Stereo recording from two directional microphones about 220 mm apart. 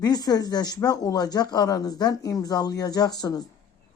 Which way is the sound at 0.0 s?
20° left (ahead or behind).